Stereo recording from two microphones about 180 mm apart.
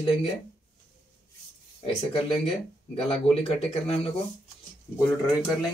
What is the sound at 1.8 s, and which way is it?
Speech, 30° left (ahead or behind).